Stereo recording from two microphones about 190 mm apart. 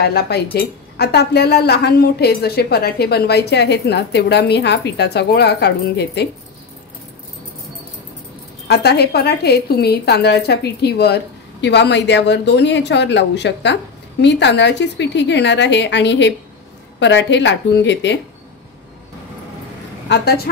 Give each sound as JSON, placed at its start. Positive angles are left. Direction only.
{"t": 0.0, "sound": "speech", "side_deg": 55}
{"t": 8.6, "sound": "a woman's voice", "side_deg": 60}
{"t": 20.1, "sound": "speech", "side_deg": 60}